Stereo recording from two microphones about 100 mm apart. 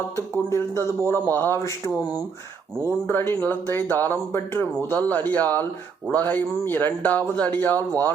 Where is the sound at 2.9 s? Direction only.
20° left (ahead or behind).